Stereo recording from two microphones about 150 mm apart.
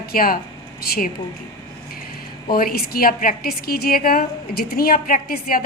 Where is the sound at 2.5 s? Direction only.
80° left.